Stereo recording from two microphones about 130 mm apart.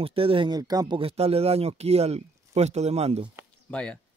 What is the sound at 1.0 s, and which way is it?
Speech, 50° right (ahead or behind).